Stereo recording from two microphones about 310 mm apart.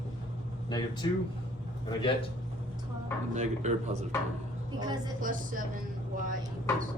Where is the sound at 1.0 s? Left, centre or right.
Centre.